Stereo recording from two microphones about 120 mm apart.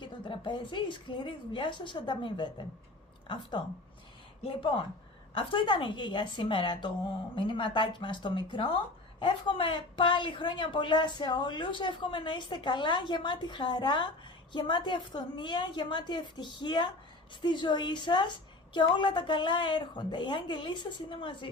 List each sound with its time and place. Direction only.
0.0 s a woman's voice: 45° left (ahead or behind)
4.4 s a woman's voice: 50° left (ahead or behind)